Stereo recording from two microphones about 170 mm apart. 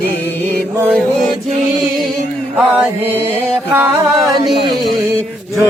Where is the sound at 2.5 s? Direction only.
5° right (ahead or behind).